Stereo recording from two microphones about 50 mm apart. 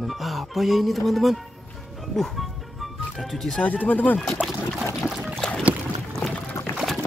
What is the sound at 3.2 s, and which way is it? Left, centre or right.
Speech, centre.